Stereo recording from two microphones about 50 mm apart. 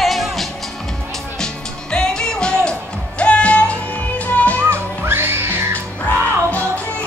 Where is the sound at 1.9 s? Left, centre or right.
Centre.